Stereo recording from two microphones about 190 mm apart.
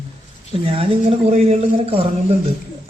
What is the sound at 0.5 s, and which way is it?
A man's voice, 30° right (ahead or behind).